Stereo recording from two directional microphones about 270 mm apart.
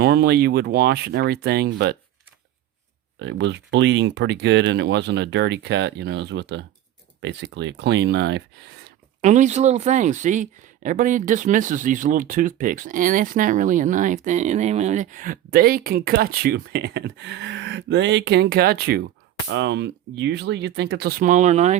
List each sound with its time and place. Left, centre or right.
0.0 s speech: right
3.2 s speech: right
9.2 s speech: right